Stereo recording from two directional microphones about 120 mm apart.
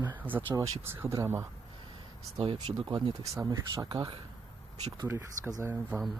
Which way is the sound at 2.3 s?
45° right (ahead or behind).